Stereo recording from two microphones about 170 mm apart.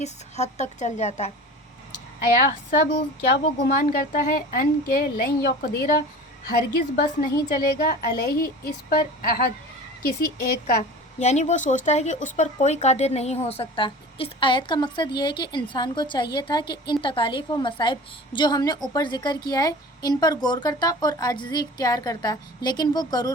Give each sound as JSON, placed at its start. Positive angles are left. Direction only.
{"t": 0.0, "sound": "speech", "side_deg": 40}
{"t": 2.3, "sound": "speech", "side_deg": 60}
{"t": 6.5, "sound": "speech", "side_deg": 55}
{"t": 11.2, "sound": "speech", "side_deg": 40}